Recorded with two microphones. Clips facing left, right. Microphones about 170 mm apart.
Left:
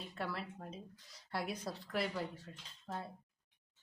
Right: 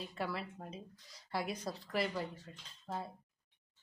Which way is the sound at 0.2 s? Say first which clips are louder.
Right 1 dB; centre (ahead or behind).